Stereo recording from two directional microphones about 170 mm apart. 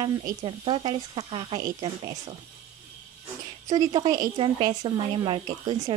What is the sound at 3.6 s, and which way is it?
A woman's voice, 25° right (ahead or behind).